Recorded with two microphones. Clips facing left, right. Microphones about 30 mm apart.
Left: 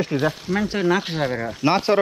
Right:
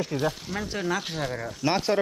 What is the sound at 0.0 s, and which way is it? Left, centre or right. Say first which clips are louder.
Speech: left 5 dB; left.